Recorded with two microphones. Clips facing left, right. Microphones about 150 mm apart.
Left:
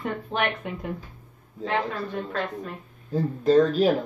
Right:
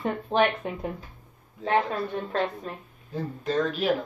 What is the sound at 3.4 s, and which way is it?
Speech, 35° left (ahead or behind).